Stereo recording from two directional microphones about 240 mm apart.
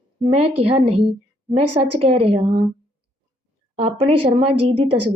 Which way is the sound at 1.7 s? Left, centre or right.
Right.